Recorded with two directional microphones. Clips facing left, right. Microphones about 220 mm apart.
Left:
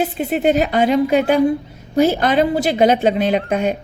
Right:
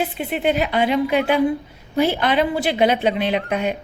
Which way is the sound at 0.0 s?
45° left (ahead or behind).